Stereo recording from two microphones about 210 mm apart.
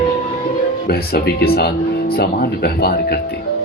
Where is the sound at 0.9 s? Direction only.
45° left (ahead or behind).